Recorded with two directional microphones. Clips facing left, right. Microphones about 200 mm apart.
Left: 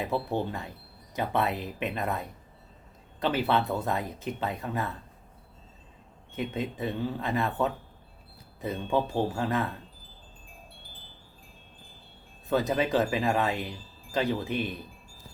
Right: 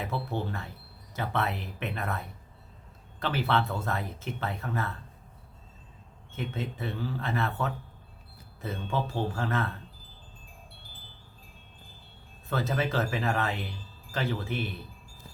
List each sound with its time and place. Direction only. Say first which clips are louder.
0.0 s speech: left 4 dB; 15° left (ahead or behind)
6.3 s speech: left 3 dB; 15° left (ahead or behind)
12.5 s speech: left 4 dB; 15° left (ahead or behind)